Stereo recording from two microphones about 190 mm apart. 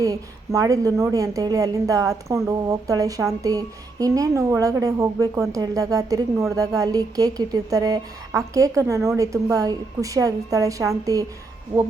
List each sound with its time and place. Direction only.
0.0 s a woman's voice: 15° right (ahead or behind)